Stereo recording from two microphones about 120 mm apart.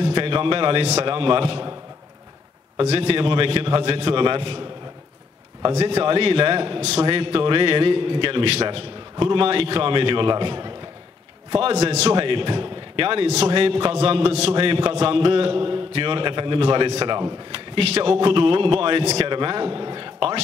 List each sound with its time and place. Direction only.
0.0 s a sound: 50° right (ahead or behind)
0.8 s a man's voice: 55° right (ahead or behind)
2.9 s a man's voice: 55° right (ahead or behind)
5.8 s a man's voice: 55° right (ahead or behind)
6.8 s a man's voice: 60° right (ahead or behind); by 10.7 s 40° right (ahead or behind)
11.5 s a man's voice: 60° right (ahead or behind)
12.2 s a man's voice: 45° right (ahead or behind)
13.6 s a man's voice: 45° right (ahead or behind)
14.5 s a man's voice: 45° right (ahead or behind)
17.0 s a man's voice: 35° right (ahead or behind)
17.7 s a man's voice: 55° right (ahead or behind)